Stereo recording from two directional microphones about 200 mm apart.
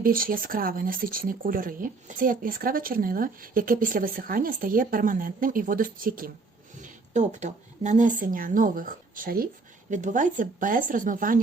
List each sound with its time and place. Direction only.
0.0 s speech: 45° right (ahead or behind)